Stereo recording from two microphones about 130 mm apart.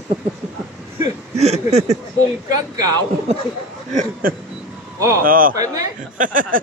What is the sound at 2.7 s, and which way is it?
Speech, 30° right (ahead or behind).